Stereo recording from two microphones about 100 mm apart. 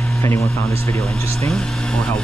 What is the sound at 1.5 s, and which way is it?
Speech, 5° left (ahead or behind).